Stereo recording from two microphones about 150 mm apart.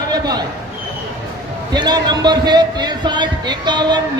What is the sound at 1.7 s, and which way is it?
Speech, 30° right (ahead or behind).